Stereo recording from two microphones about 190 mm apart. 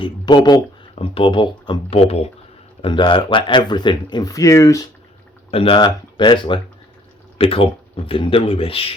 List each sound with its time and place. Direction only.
0.0 s speech: 20° left (ahead or behind)
5.5 s speech: 30° left (ahead or behind)